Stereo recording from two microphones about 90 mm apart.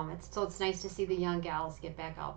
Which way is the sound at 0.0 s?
15° left (ahead or behind).